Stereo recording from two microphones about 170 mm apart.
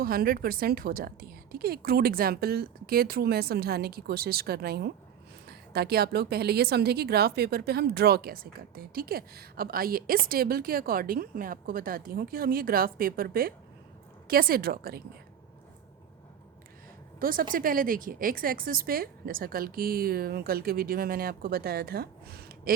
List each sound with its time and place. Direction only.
0.0 s a woman's voice: 60° right (ahead or behind)
17.2 s a woman's voice: 55° right (ahead or behind)